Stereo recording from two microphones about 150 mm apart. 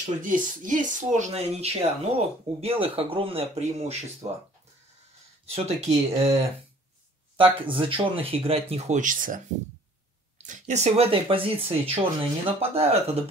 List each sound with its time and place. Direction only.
0.2 s speech: 60° right (ahead or behind)
5.5 s speech: 45° right (ahead or behind)
7.5 s speech: 35° right (ahead or behind); by 9.4 s 65° right (ahead or behind)
10.4 s speech: 55° right (ahead or behind)